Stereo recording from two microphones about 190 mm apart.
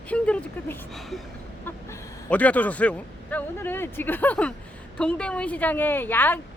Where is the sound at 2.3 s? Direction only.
5° left (ahead or behind).